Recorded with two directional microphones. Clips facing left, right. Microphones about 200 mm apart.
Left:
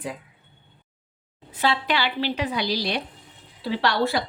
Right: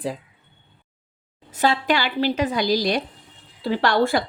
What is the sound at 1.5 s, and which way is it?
A woman's voice, 45° right (ahead or behind).